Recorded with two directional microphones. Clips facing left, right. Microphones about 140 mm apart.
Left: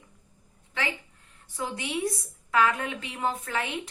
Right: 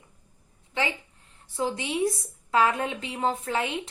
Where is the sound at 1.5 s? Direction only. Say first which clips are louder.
Right 4 dB; 25° right (ahead or behind).